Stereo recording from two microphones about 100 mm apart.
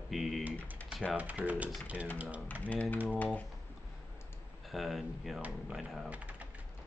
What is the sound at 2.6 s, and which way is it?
Speech, 15° left (ahead or behind).